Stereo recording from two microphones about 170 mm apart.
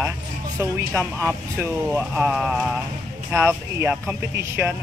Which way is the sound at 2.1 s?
5° right (ahead or behind).